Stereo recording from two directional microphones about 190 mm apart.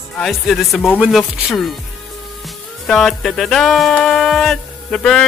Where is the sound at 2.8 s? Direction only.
Centre (ahead or behind).